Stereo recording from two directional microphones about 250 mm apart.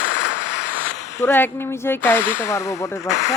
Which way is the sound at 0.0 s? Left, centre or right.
Left.